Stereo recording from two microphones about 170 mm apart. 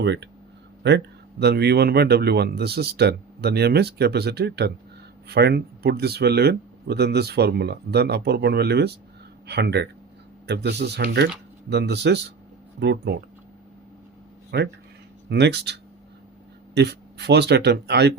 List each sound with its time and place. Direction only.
0.0 s speech: 90° right
14.5 s speech: 80° right